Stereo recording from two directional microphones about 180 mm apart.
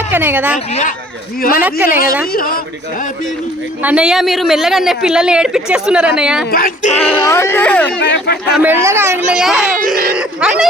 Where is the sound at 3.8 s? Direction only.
5° right (ahead or behind).